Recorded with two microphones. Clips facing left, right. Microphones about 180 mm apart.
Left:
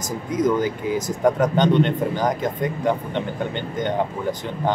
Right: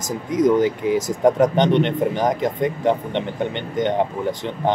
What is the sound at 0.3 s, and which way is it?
Speech, 20° right (ahead or behind).